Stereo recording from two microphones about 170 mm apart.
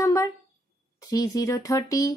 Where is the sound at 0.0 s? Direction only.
20° left (ahead or behind).